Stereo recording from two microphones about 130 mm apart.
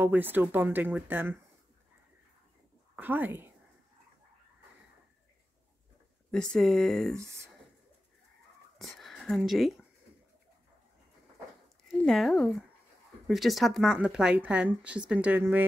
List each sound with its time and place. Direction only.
0.0 s speech: 15° right (ahead or behind)
3.0 s speech: 15° right (ahead or behind)
6.3 s speech: 5° left (ahead or behind)
7.2 s speech: 20° right (ahead or behind)
8.7 s a sound: centre (ahead or behind)
12.0 s speech: 5° left (ahead or behind); by 15.6 s 15° right (ahead or behind)